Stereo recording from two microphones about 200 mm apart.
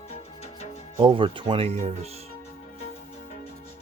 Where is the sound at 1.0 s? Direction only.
25° right (ahead or behind).